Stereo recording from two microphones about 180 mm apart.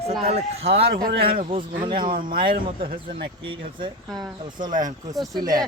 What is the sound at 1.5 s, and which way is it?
Speech, 25° right (ahead or behind).